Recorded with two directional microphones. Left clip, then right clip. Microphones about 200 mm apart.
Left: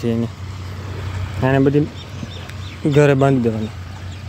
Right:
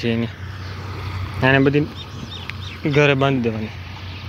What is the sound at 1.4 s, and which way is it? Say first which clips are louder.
Speech: even; 10° left (ahead or behind).